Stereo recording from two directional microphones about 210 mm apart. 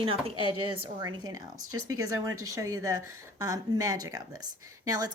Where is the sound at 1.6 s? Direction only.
90° right.